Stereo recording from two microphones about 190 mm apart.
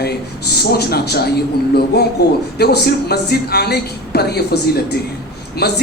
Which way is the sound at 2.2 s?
60° left (ahead or behind).